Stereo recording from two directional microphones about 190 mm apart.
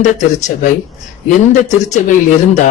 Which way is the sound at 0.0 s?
40° left (ahead or behind).